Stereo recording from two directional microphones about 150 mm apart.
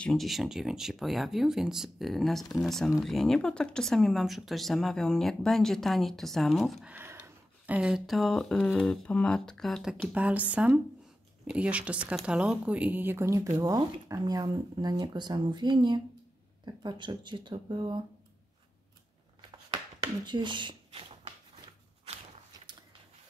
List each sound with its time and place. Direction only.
0.0 s speech: centre (ahead or behind)
6.9 s speech: 10° right (ahead or behind); by 18.0 s 30° right (ahead or behind)
19.7 s a sound: 30° right (ahead or behind)